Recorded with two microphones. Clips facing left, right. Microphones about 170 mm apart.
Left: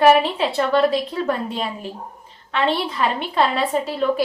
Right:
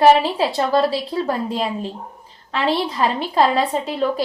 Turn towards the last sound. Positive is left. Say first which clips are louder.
# left 1 dB
turn(degrees=-35)  # may be behind; listen again after turning